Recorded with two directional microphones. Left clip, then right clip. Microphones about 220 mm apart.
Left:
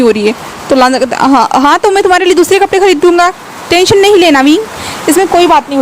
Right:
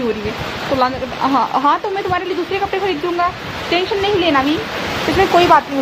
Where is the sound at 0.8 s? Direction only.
50° left (ahead or behind).